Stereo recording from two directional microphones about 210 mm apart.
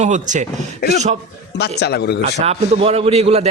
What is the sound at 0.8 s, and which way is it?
A man's voice, 50° left (ahead or behind).